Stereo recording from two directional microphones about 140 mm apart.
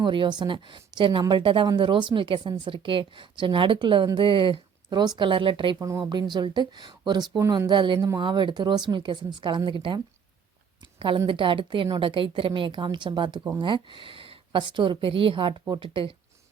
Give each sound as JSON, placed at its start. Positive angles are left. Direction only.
{"t": 0.0, "sound": "a woman's voice", "side_deg": -35}
{"t": 7.7, "sound": "a woman's voice", "side_deg": -35}
{"t": 11.3, "sound": "a woman's voice", "side_deg": -35}